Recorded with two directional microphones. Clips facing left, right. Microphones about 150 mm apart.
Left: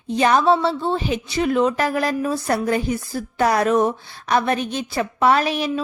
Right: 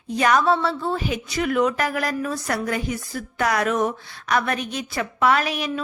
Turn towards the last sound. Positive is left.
turn(degrees=30)  # may be behind; listen again after turning